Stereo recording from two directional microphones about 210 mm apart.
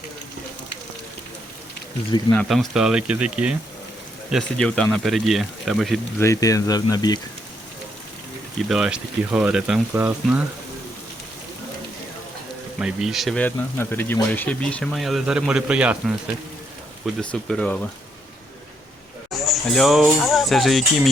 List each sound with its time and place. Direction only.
2.3 s speech: 5° left (ahead or behind)
6.1 s speech: 15° left (ahead or behind)
8.7 s speech: 5° right (ahead or behind)
12.8 s speech: centre (ahead or behind)
19.5 s speech: centre (ahead or behind)